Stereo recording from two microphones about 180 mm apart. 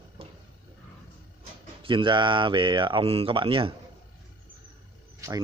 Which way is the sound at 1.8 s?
25° right (ahead or behind).